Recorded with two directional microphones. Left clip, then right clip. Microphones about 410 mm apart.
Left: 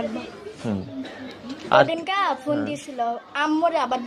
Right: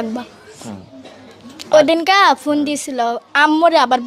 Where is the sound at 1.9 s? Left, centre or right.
Right.